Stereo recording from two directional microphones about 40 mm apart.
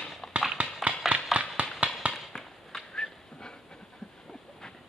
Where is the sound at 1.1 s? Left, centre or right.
Right.